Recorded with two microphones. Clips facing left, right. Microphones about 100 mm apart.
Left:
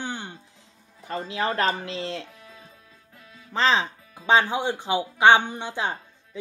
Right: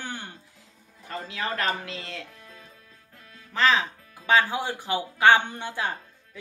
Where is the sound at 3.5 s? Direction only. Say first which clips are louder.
Left 1 dB; 30° left (ahead or behind).